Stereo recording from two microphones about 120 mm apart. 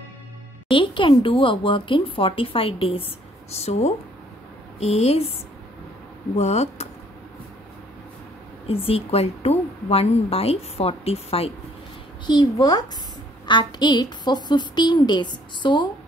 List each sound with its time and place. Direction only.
0.7 s speech: 45° left (ahead or behind)
3.5 s a woman's voice: 65° left (ahead or behind)
6.3 s a woman's voice: 65° left (ahead or behind)
8.6 s a woman's voice: 55° left (ahead or behind)
12.3 s a woman's voice: 35° left (ahead or behind)